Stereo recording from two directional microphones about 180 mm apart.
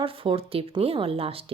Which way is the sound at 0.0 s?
30° right (ahead or behind).